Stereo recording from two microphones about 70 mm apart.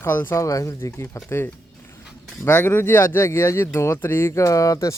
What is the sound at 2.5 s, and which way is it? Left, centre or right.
Speech, left.